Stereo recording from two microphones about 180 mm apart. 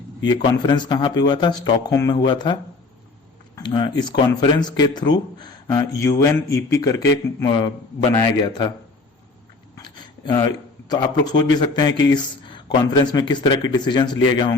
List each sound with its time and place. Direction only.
0.3 s speech: 25° left (ahead or behind)
9.7 s speech: 20° left (ahead or behind)